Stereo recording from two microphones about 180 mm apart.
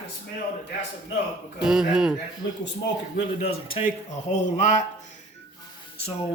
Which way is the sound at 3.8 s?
40° left (ahead or behind).